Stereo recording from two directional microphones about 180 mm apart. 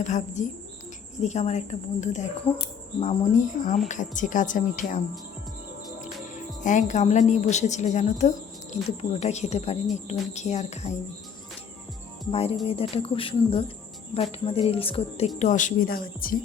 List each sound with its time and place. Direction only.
0.0 s a woman's voice: 40° left (ahead or behind)
6.6 s a woman's voice: 45° left (ahead or behind)
12.3 s a woman's voice: 35° left (ahead or behind)
15.4 s speech: 45° left (ahead or behind)